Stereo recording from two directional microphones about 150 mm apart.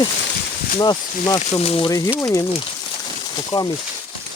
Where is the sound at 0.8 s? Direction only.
25° left (ahead or behind).